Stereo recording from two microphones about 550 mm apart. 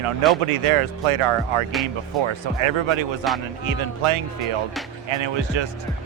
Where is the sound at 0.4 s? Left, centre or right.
Right.